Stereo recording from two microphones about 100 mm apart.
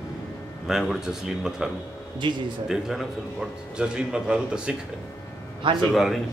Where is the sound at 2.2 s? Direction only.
50° right (ahead or behind).